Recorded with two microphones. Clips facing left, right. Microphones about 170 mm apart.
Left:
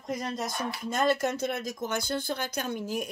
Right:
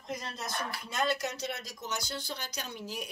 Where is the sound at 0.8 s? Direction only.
45° left (ahead or behind).